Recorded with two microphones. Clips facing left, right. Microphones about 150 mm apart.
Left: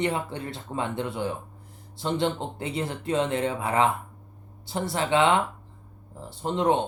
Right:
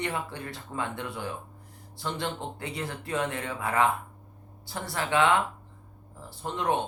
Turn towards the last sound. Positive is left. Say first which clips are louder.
# left 5 dB
turn(degrees=20)  # may be behind; listen again after turning